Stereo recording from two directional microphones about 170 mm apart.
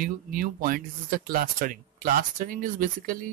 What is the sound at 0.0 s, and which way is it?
Speech, 55° right (ahead or behind).